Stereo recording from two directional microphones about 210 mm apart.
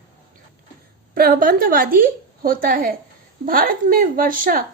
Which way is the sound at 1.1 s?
45° right (ahead or behind).